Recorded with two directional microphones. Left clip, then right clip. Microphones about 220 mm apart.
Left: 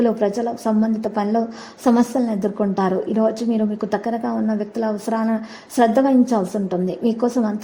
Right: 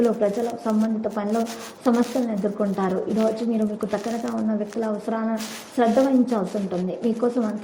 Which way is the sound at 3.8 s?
35° left (ahead or behind).